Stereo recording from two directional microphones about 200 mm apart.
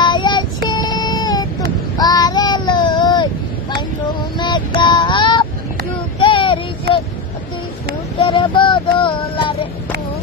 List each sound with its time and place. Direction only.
0.0 s child singing: 20° left (ahead or behind)
4.4 s child singing: 25° left (ahead or behind)
8.2 s child singing: 25° left (ahead or behind)